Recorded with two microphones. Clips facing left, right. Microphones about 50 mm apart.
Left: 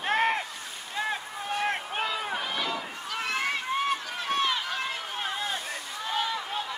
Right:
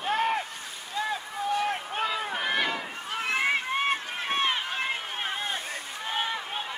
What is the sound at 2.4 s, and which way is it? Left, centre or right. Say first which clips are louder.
Run: right 3 dB; right.